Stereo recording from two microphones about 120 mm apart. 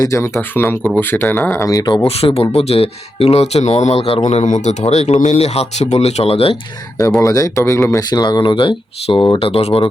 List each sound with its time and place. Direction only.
0.0 s speech: 25° left (ahead or behind)
2.0 s speech: 55° left (ahead or behind)
4.3 s speech: 70° left (ahead or behind); by 6.6 s 55° left (ahead or behind)
7.2 s speech: 30° left (ahead or behind); by 9.2 s 45° left (ahead or behind)
9.4 s speech: 55° left (ahead or behind)